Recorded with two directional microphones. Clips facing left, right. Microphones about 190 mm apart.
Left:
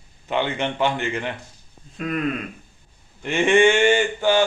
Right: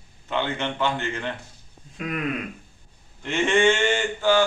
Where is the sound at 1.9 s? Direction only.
10° right (ahead or behind).